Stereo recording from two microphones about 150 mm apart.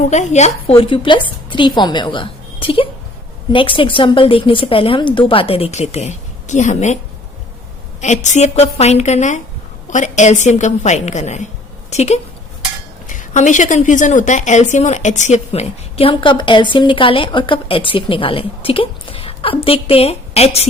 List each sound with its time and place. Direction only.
0.0 s a woman's voice: 50° left (ahead or behind)
8.0 s a woman's voice: 55° left (ahead or behind)